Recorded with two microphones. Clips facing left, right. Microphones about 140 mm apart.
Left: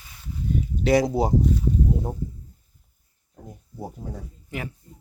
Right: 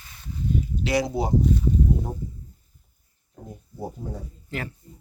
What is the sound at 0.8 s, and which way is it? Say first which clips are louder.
Speech: left 5 dB; 50° left (ahead or behind).